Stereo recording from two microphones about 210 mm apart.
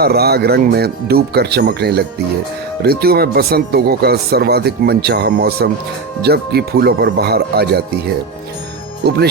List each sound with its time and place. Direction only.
0.0 s speech: 50° right (ahead or behind)
9.0 s speech: 50° right (ahead or behind)